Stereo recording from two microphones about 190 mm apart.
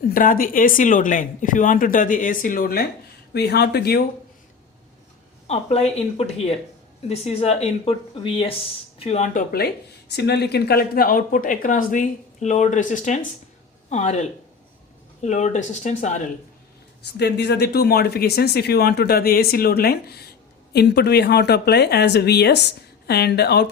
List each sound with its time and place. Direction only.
0.1 s speech: 45° left (ahead or behind)
5.5 s speech: 35° left (ahead or behind)
9.5 s speech: 55° left (ahead or behind); by 16.2 s 40° left (ahead or behind)
17.2 s speech: 60° left (ahead or behind)